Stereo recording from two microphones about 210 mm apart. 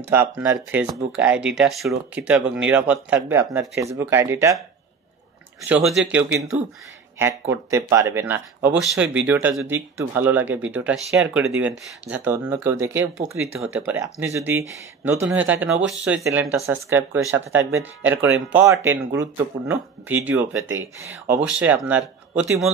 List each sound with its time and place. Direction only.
0.1 s speech: 10° right (ahead or behind)
5.7 s speech: centre (ahead or behind)
6.2 s speech: 65° right (ahead or behind)
7.2 s speech: 10° right (ahead or behind)